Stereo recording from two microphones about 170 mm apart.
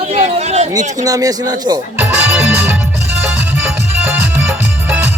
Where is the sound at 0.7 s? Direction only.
20° right (ahead or behind).